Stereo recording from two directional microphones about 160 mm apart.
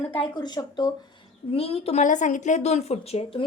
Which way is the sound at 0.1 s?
30° left (ahead or behind).